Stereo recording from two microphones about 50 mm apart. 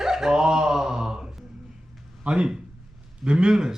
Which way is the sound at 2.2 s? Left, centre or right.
Right.